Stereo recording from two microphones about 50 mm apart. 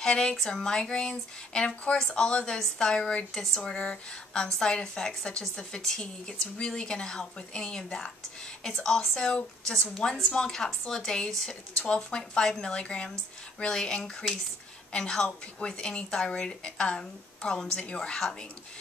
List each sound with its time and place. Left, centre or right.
0.0 s a woman's voice: centre